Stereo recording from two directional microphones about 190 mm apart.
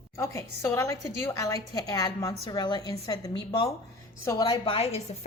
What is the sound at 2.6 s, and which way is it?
A woman's voice, 20° left (ahead or behind).